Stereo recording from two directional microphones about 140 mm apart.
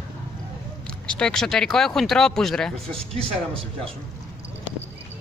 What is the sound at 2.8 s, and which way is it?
Speech, 45° right (ahead or behind).